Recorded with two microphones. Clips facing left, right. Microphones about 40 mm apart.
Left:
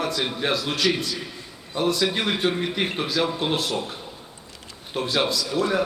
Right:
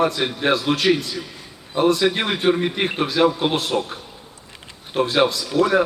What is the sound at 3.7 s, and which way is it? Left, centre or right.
Speech, right.